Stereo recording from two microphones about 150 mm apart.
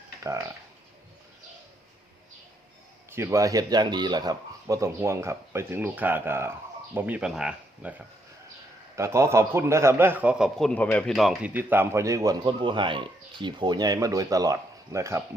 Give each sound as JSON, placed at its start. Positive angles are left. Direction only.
{"t": 0.2, "sound": "speech", "side_deg": -20}
{"t": 3.1, "sound": "a man's voice", "side_deg": -20}
{"t": 11.5, "sound": "speech", "side_deg": -15}